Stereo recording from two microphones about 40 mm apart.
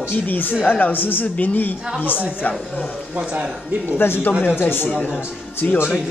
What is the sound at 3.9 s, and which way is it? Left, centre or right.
Speech, left.